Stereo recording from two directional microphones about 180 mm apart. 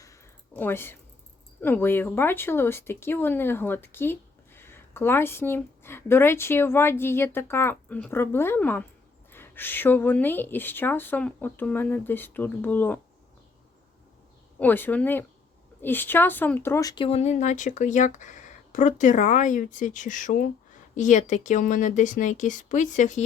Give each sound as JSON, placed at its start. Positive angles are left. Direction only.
{"t": 0.0, "sound": "a sound", "side_deg": 15}
{"t": 1.6, "sound": "speech", "side_deg": 10}
{"t": 14.6, "sound": "speech", "side_deg": 10}